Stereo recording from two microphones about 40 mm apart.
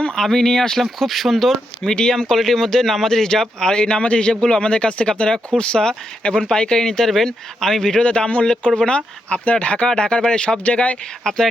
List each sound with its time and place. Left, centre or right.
0.2 s speech: centre
1.8 s speech: left
2.3 s speech: centre; by 10.6 s left
10.6 s speech: left
11.2 s speech: centre